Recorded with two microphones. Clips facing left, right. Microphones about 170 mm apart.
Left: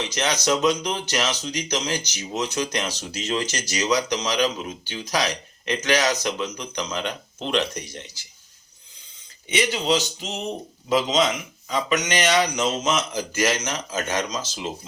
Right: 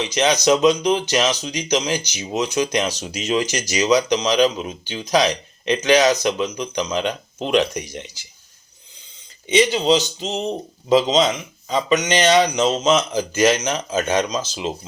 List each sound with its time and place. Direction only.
0.0 s speech: 15° right (ahead or behind)
9.5 s speech: 20° right (ahead or behind)